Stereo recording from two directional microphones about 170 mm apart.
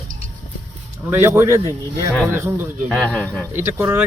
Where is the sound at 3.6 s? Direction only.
15° right (ahead or behind).